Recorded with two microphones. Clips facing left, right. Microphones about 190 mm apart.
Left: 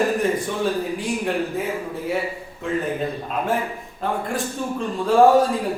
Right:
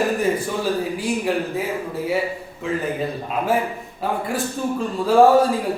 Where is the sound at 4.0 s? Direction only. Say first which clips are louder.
Right 1 dB; 5° right (ahead or behind).